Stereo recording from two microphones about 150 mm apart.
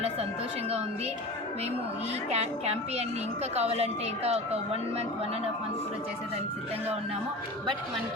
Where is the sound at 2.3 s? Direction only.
45° right (ahead or behind).